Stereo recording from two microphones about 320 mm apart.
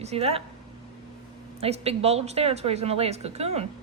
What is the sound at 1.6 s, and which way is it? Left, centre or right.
A woman's voice, centre.